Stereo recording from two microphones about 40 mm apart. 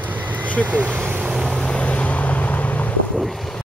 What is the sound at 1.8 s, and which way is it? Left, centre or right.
Vehicle, left.